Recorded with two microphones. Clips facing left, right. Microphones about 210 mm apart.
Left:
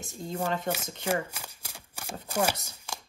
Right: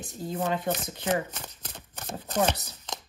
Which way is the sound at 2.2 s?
10° left (ahead or behind).